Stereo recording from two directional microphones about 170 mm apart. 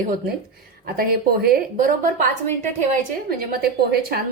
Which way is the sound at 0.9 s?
60° right (ahead or behind).